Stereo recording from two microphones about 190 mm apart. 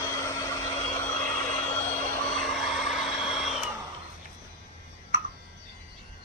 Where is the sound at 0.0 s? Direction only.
15° left (ahead or behind).